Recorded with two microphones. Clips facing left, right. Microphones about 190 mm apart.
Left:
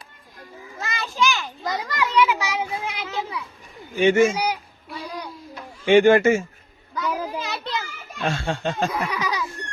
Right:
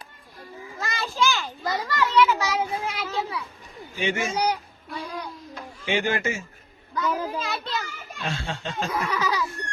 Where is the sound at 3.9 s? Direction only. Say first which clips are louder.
Left 11 dB; 50° left (ahead or behind).